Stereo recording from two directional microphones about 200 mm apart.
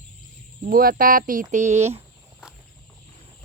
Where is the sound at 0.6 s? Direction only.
45° right (ahead or behind).